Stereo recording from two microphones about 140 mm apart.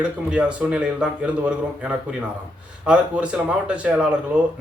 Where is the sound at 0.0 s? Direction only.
5° right (ahead or behind).